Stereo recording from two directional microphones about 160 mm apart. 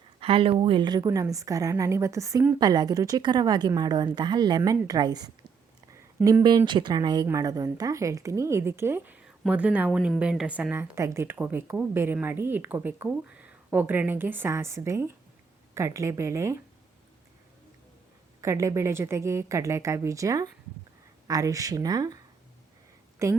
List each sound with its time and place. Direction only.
0.2 s a woman's voice: 35° right (ahead or behind); by 2.6 s 15° right (ahead or behind)
2.6 s a woman's voice: 25° right (ahead or behind)
6.2 s speech: 5° right (ahead or behind)
6.7 s a woman's voice: 30° right (ahead or behind)
18.3 s a woman's voice: 20° right (ahead or behind)